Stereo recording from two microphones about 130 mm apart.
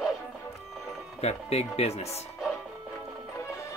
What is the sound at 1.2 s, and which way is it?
Speech, 55° left (ahead or behind).